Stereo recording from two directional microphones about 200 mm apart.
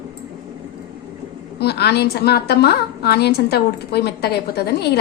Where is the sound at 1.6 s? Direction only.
55° left (ahead or behind).